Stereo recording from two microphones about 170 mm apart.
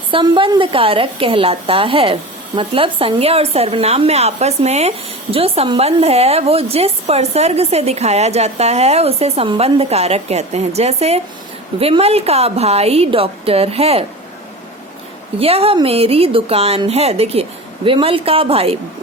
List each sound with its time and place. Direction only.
0.1 s a woman's voice: 30° right (ahead or behind)
15.4 s a woman's voice: 35° right (ahead or behind)